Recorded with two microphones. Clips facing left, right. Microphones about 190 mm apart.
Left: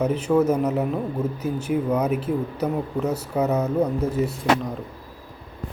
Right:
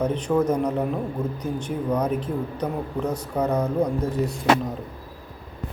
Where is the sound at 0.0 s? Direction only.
5° left (ahead or behind).